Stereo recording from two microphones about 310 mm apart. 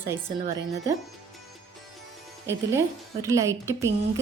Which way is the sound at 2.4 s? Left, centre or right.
Centre.